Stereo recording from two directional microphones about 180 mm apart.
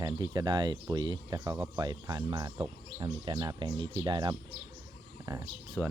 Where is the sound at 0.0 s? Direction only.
25° right (ahead or behind).